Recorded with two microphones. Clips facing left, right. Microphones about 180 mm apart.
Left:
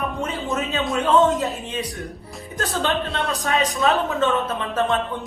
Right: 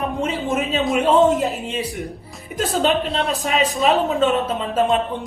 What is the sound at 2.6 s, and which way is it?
A woman's voice, 20° right (ahead or behind).